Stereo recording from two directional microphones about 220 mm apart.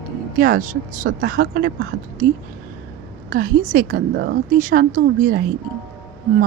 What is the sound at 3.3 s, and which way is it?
A woman's voice, 40° right (ahead or behind).